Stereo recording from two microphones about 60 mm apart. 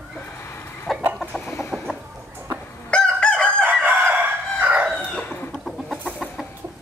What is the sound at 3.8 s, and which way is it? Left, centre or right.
Crowing, right.